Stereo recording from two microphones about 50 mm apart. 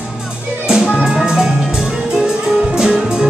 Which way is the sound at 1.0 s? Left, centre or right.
Centre.